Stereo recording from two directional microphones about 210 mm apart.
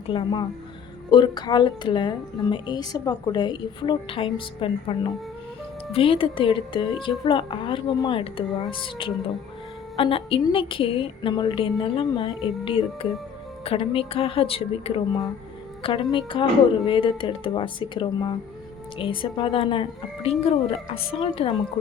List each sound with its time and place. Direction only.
0.1 s a woman's voice: 20° left (ahead or behind)